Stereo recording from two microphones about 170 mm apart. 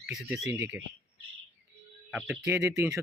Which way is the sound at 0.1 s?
Centre (ahead or behind).